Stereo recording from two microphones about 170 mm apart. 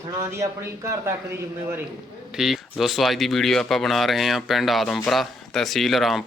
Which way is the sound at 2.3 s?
Centre (ahead or behind).